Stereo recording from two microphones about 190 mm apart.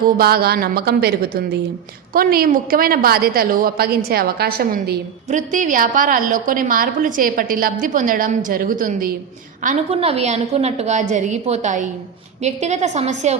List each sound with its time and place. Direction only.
0.2 s a woman's voice: 55° right (ahead or behind)
9.6 s a woman's voice: 30° right (ahead or behind)